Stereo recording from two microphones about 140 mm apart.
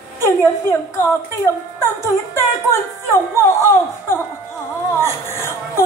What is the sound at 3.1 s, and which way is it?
A woman's voice, 20° left (ahead or behind).